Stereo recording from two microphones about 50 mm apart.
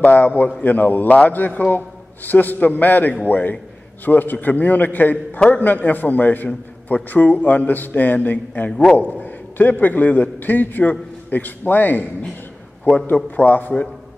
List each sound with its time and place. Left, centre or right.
0.0 s a man's voice: left